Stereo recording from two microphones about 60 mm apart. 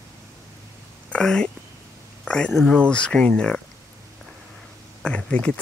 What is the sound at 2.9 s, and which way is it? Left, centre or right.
Speech, centre.